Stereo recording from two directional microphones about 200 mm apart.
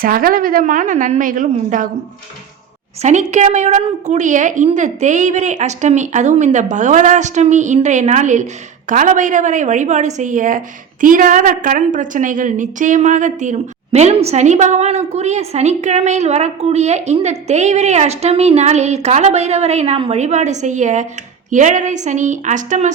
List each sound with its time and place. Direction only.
0.0 s a woman's voice: 45° right (ahead or behind)
3.0 s a woman's voice: 35° right (ahead or behind)